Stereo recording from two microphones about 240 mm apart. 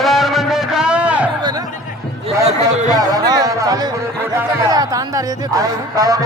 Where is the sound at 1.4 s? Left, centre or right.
Centre.